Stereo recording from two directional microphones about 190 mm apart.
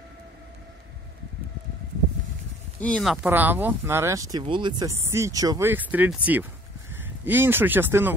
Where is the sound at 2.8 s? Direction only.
5° left (ahead or behind).